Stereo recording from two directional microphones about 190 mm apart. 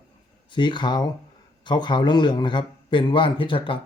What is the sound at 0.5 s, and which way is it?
A man's voice, 25° left (ahead or behind).